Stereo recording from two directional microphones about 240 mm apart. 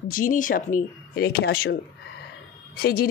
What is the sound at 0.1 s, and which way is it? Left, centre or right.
Speech, left.